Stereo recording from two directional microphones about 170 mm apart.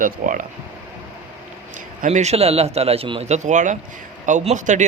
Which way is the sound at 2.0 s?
40° right (ahead or behind).